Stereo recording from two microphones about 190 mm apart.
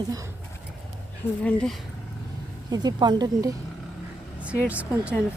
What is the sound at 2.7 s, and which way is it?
Speech, 20° right (ahead or behind).